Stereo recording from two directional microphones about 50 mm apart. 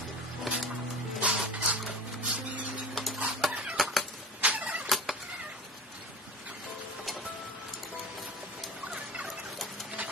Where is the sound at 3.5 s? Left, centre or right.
Right.